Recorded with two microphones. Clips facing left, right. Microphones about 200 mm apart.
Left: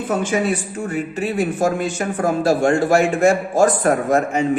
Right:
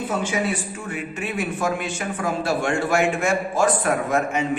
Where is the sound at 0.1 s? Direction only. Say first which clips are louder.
Left 7 dB; 50° left (ahead or behind).